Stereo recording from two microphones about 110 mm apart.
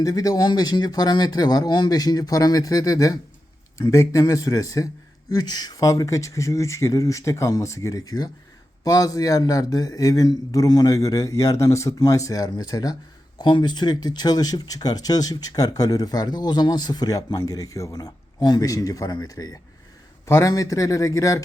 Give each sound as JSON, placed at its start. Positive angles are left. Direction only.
{"t": 0.0, "sound": "speech", "side_deg": 35}